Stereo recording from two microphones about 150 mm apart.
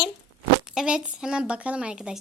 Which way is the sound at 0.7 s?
5° right (ahead or behind).